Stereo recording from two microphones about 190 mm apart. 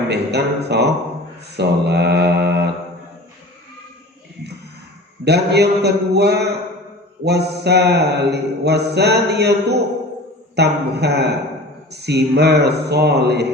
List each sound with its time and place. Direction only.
0.1 s speech: 60° right (ahead or behind)
1.5 s mantra: 60° right (ahead or behind)
5.2 s speech: 60° right (ahead or behind)